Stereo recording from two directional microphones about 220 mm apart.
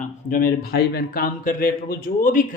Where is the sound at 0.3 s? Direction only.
40° left (ahead or behind).